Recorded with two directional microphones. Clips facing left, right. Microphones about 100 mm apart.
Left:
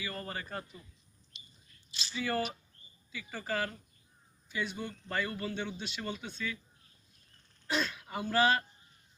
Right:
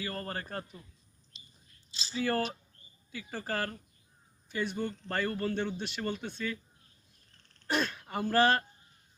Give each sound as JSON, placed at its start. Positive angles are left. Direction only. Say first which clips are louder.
{"t": 0.0, "sound": "speech", "louder": "right 3 dB", "side_deg": -45}
{"t": 2.0, "sound": "speech", "louder": "right 3 dB", "side_deg": -40}
{"t": 7.7, "sound": "speech", "louder": "right 2 dB", "side_deg": -45}